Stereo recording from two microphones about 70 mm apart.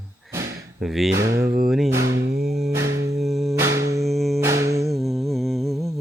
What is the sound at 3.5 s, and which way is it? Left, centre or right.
Mains hum, right.